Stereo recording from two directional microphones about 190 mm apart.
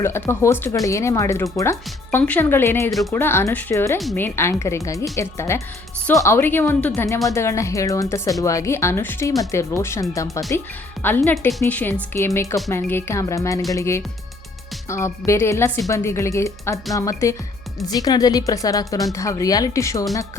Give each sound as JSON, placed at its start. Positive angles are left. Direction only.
{"t": 0.0, "sound": "speech", "side_deg": 15}
{"t": 4.0, "sound": "a woman's voice", "side_deg": 5}
{"t": 4.4, "sound": "speech", "side_deg": 15}